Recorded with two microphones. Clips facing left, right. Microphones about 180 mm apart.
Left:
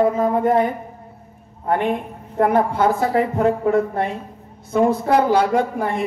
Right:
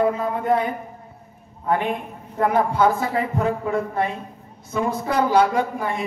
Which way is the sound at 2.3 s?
55° left (ahead or behind).